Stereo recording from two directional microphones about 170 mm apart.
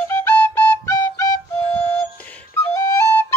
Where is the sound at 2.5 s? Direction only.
15° left (ahead or behind).